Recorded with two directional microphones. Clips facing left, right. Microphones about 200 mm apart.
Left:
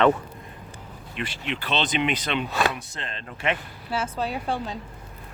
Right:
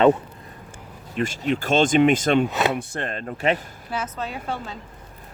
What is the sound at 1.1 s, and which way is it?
Speech, 45° right (ahead or behind).